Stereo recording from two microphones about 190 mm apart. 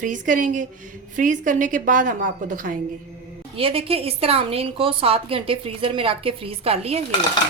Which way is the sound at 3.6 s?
30° right (ahead or behind).